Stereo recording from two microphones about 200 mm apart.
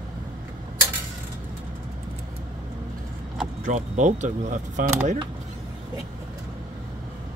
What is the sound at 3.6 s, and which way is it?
Speech, 35° right (ahead or behind).